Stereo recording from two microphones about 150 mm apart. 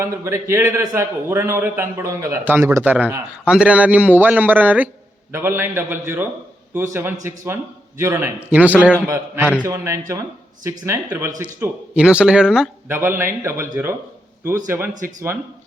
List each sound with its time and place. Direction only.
0.0 s a man's voice: 15° right (ahead or behind)
13.0 s a man's voice: 15° right (ahead or behind)